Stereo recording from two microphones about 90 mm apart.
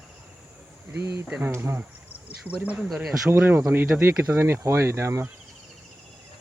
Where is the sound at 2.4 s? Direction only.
15° right (ahead or behind); by 5.3 s 30° right (ahead or behind).